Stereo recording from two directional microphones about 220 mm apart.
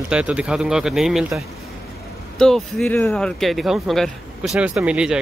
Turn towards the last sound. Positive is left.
turn(degrees=-5)  # may be behind; listen again after turning